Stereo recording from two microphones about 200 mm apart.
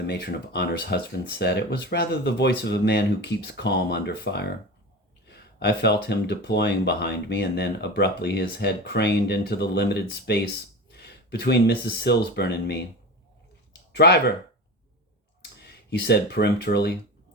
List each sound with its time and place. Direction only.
0.1 s speech: 55° left (ahead or behind)
13.9 s speech: 55° left (ahead or behind)
15.6 s speech: 55° left (ahead or behind)